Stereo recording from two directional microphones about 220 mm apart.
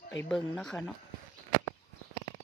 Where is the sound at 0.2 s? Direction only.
5° left (ahead or behind).